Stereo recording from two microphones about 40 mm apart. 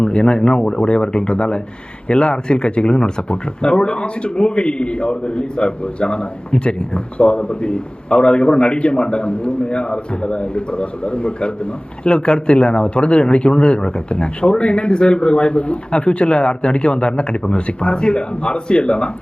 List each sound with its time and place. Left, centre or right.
0.0 s speech: left